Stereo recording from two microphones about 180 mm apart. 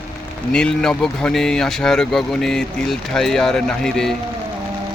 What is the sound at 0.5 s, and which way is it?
Speech, 5° left (ahead or behind).